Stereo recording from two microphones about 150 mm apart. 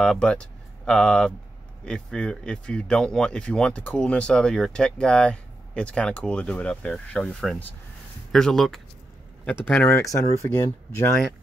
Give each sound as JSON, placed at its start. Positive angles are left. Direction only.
{"t": 0.0, "sound": "speech", "side_deg": 5}